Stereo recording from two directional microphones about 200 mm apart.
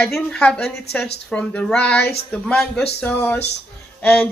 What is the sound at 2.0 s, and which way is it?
Speech, 55° left (ahead or behind).